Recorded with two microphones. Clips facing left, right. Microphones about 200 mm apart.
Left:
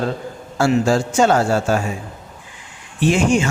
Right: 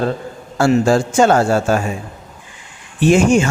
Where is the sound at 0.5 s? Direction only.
50° right (ahead or behind).